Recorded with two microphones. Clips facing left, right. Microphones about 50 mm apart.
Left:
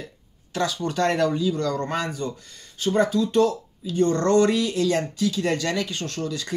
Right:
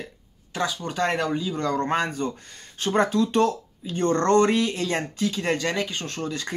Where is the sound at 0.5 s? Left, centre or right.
Centre.